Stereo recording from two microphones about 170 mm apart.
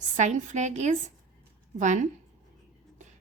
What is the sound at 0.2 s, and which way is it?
A woman's voice, 45° right (ahead or behind).